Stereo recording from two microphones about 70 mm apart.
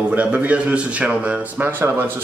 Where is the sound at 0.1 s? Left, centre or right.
Right.